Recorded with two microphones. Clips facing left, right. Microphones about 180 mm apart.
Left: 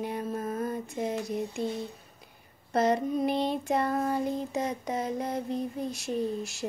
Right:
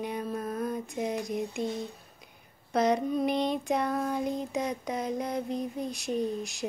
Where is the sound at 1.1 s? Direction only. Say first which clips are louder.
Even; 15° right (ahead or behind).